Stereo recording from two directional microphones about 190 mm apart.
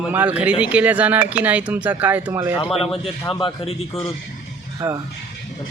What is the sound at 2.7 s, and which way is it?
A man's voice, 30° left (ahead or behind).